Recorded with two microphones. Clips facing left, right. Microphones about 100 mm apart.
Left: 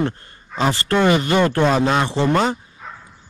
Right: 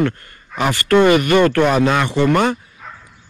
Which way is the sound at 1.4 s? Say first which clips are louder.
Right 3 dB; 20° left (ahead or behind).